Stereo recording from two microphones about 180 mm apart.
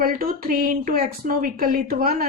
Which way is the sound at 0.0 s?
55° right (ahead or behind).